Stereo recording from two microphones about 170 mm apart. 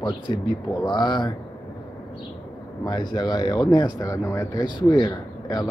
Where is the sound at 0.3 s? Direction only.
20° left (ahead or behind).